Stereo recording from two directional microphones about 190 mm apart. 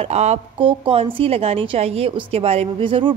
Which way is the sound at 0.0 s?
35° right (ahead or behind).